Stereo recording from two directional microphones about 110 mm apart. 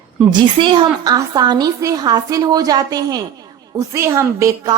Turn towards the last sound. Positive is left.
turn(degrees=-25)  # may be behind; listen again after turning